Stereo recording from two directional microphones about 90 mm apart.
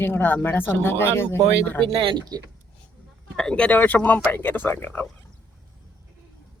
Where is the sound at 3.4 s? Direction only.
10° left (ahead or behind).